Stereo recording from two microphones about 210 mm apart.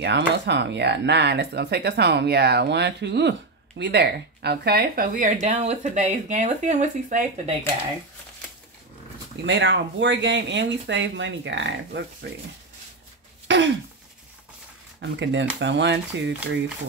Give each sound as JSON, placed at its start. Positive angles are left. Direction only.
{"t": 0.0, "sound": "speech", "side_deg": -55}
{"t": 9.5, "sound": "speech", "side_deg": -60}
{"t": 13.5, "sound": "speech", "side_deg": -60}
{"t": 15.0, "sound": "speech", "side_deg": -60}